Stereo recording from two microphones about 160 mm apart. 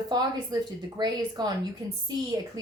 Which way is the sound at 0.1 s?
25° right (ahead or behind).